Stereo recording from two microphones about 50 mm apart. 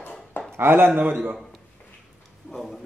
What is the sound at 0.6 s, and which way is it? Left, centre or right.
Speech, right.